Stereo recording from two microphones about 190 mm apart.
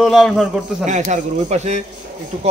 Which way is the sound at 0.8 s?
40° right (ahead or behind).